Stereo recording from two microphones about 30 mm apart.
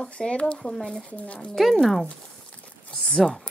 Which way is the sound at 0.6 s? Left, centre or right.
Left.